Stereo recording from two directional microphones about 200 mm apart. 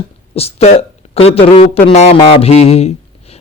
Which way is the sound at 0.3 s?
30° left (ahead or behind).